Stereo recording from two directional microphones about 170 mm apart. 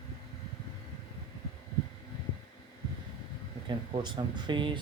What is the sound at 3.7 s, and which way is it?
Speech, 25° right (ahead or behind).